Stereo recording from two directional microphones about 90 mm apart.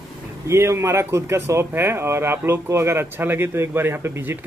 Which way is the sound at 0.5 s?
30° right (ahead or behind).